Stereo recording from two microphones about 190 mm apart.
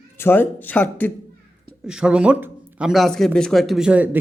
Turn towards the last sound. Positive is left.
turn(degrees=-10)  # may be behind; listen again after turning